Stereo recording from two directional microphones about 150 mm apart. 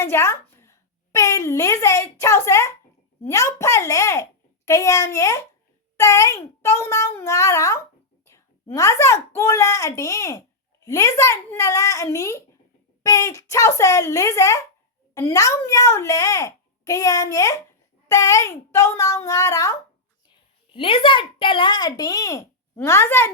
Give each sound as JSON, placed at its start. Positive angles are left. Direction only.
{"t": 0.0, "sound": "a woman's voice", "side_deg": 20}
{"t": 8.2, "sound": "a sound", "side_deg": 20}
{"t": 9.3, "sound": "a child's voice", "side_deg": 20}
{"t": 20.7, "sound": "a child's voice", "side_deg": 35}